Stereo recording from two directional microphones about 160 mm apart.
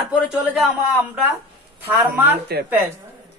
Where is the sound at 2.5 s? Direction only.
80° right.